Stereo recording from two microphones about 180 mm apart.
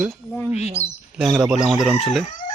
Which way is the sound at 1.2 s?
5° right (ahead or behind).